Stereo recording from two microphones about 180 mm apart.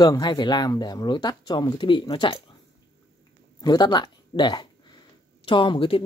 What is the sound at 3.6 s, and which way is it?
Speech, 25° left (ahead or behind).